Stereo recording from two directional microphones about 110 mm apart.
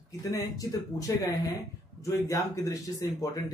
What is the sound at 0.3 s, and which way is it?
Speech, 30° left (ahead or behind).